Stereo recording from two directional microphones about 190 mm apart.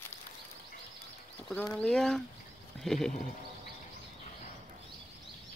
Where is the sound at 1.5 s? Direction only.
5° left (ahead or behind).